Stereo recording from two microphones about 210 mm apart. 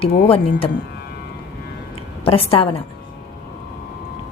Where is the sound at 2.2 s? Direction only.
25° left (ahead or behind).